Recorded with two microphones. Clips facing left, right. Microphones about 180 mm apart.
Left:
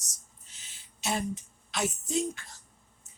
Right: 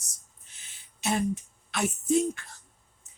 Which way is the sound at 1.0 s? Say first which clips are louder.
Right 4 dB; 60° right (ahead or behind).